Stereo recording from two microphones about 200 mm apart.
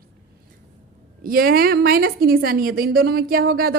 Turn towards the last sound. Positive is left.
turn(degrees=-50)  # may be behind; listen again after turning